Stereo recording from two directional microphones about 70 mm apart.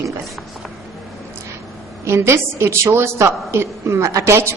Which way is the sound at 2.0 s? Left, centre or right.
Right.